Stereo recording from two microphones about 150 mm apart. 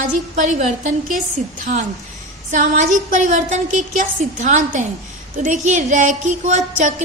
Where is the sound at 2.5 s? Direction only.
55° right (ahead or behind).